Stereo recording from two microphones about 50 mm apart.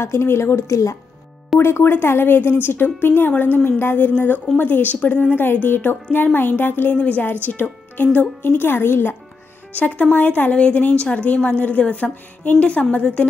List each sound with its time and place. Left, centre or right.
0.0 s a woman's voice: left
1.6 s speech: left
3.3 s speech: left
5.4 s a woman's voice: left
8.4 s speech: left
9.8 s a woman's voice: left